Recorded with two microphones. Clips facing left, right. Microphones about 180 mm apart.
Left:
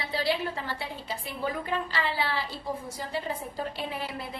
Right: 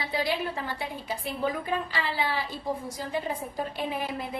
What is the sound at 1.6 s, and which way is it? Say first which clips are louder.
A woman's voice: even; 15° right (ahead or behind).